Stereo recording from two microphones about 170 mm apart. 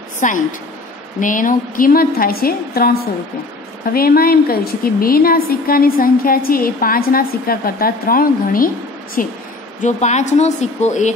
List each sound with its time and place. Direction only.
0.2 s a woman's voice: 50° left (ahead or behind)
3.9 s a woman's voice: 60° left (ahead or behind)
9.8 s speech: 45° left (ahead or behind)